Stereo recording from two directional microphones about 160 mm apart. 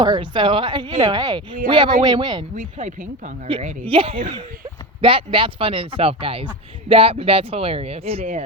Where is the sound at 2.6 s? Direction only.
50° right (ahead or behind).